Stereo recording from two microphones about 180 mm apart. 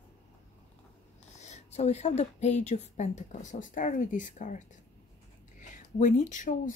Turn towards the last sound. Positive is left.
turn(degrees=45)  # may be behind; listen again after turning